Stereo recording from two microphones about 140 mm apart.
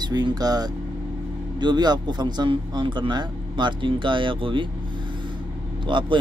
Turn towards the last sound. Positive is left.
turn(degrees=-35)  # may be behind; listen again after turning